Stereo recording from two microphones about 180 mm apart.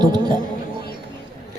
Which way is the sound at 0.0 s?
25° right (ahead or behind).